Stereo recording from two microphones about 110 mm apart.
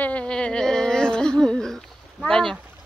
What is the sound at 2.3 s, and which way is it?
Speech, 5° left (ahead or behind).